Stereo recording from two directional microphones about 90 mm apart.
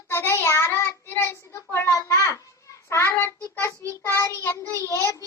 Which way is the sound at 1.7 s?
30° left (ahead or behind).